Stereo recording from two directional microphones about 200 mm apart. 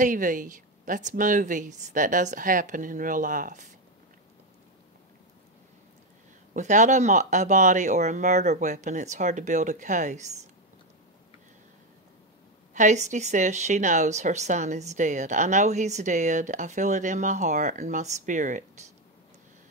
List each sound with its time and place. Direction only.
0.0 s a woman's voice: 40° right (ahead or behind)
6.5 s a woman's voice: 35° right (ahead or behind)
12.7 s a woman's voice: 35° right (ahead or behind)